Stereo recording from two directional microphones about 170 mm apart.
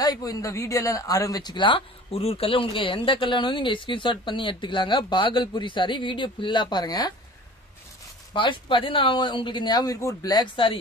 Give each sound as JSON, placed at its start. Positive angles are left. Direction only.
{"t": 0.0, "sound": "speech", "side_deg": 20}
{"t": 8.3, "sound": "speech", "side_deg": 30}